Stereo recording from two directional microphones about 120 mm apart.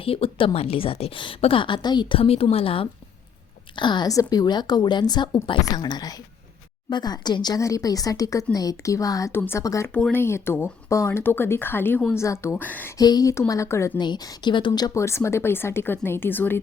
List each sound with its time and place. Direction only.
0.0 s a woman's voice: 50° left (ahead or behind); by 9.9 s 25° left (ahead or behind)
9.9 s speech: 15° left (ahead or behind)
13.0 s a woman's voice: 30° left (ahead or behind)
14.0 s a woman's voice: 40° left (ahead or behind); by 16.6 s 15° left (ahead or behind)